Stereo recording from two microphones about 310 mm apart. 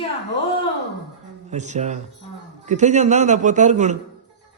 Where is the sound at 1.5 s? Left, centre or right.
Right.